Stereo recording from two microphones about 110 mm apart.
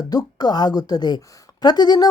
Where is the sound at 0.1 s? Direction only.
40° left (ahead or behind).